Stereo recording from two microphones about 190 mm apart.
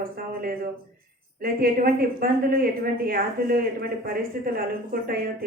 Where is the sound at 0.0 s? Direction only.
50° right (ahead or behind).